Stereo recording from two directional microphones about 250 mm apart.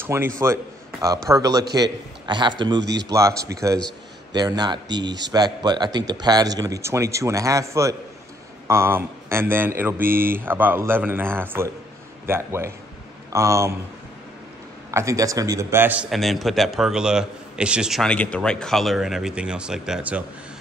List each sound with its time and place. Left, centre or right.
0.0 s speech: centre
2.8 s speech: right
3.1 s speech: centre
14.9 s a man's voice: centre